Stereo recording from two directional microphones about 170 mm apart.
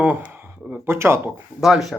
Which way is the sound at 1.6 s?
Centre (ahead or behind).